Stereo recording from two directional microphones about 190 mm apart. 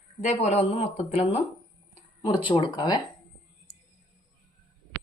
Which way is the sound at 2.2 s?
20° left (ahead or behind).